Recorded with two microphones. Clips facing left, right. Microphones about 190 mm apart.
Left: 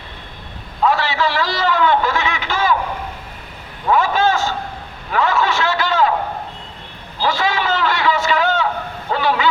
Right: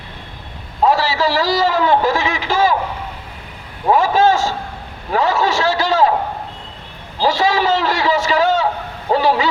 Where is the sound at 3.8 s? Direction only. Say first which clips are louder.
Right 3 dB; 35° right (ahead or behind).